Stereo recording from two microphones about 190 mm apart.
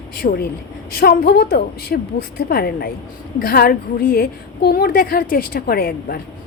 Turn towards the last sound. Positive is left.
turn(degrees=55)  # may be behind; listen again after turning